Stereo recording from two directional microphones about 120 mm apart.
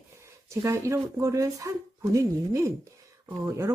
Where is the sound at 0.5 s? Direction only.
25° right (ahead or behind).